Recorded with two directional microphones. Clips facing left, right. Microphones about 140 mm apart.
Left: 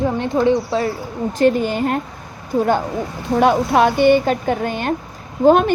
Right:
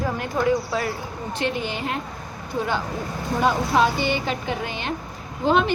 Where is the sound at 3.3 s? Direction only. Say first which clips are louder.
Left 6 dB; 60° left (ahead or behind).